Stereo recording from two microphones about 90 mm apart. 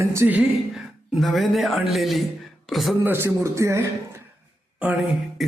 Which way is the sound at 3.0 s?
25° right (ahead or behind).